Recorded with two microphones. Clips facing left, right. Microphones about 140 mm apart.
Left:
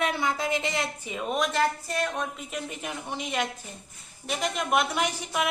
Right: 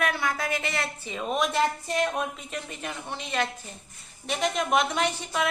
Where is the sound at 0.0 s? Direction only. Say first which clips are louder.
Left 1 dB; 20° left (ahead or behind).